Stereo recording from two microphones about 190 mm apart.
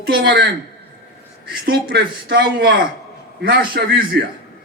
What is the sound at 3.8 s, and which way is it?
Speech, 60° right (ahead or behind).